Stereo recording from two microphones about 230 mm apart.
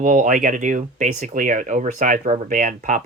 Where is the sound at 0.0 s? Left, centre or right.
Right.